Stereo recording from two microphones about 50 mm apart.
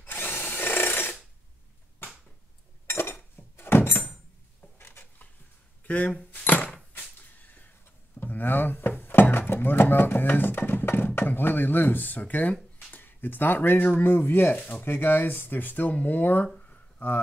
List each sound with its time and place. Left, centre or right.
0.0 s drill: left
2.0 s a sound: left
5.9 s keys jangling: left
7.2 s whip: left
8.2 s thunk: left
9.4 s speech: left
12.7 s a sound: left
14.0 s speech: left
14.9 s speech: left
16.5 s a sound: left